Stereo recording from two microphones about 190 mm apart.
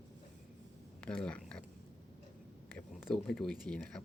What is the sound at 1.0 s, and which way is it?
Speech, 5° left (ahead or behind).